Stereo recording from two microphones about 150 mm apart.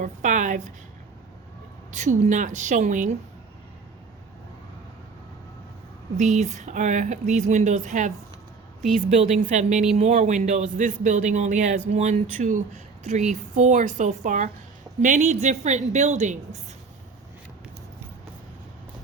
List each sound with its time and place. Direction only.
0.0 s a woman's voice: 55° right (ahead or behind)
1.9 s a woman's voice: 50° right (ahead or behind)
6.1 s speech: 50° right (ahead or behind)